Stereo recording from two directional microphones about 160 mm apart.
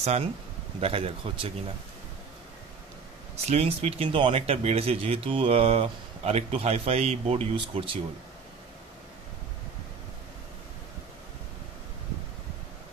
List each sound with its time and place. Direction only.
0.0 s speech: 40° right (ahead or behind)
3.4 s speech: 40° right (ahead or behind)